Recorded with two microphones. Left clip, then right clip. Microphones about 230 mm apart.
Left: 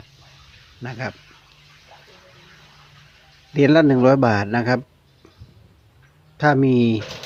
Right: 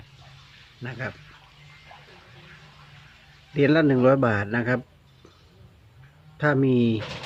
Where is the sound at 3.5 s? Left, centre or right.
Left.